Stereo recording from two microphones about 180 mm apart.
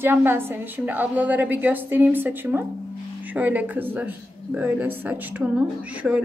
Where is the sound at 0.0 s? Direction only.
10° right (ahead or behind).